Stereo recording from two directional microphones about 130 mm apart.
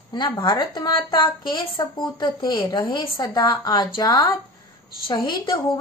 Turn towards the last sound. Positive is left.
turn(degrees=35)  # may be behind; listen again after turning